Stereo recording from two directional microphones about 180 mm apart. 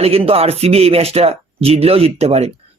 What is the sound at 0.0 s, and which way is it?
Speech, 35° right (ahead or behind).